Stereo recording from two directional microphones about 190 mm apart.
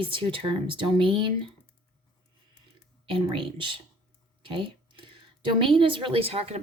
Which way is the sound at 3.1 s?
25° right (ahead or behind).